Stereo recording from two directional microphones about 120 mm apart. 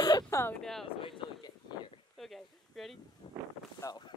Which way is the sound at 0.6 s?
5° left (ahead or behind).